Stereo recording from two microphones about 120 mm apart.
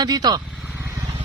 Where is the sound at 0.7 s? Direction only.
25° right (ahead or behind).